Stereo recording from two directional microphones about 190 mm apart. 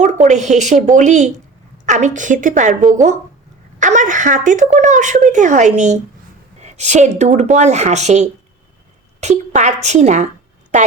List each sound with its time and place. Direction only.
0.0 s a woman's voice: 40° right (ahead or behind)